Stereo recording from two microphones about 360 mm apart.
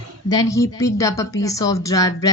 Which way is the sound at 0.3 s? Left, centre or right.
Centre.